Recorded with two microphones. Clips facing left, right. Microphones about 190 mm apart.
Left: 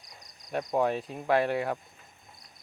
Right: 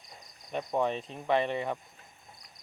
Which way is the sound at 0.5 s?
5° left (ahead or behind).